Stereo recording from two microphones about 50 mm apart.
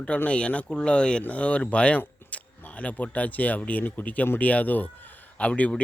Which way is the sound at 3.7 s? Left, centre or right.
Left.